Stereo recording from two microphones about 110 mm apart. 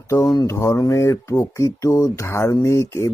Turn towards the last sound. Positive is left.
turn(degrees=25)  # may be behind; listen again after turning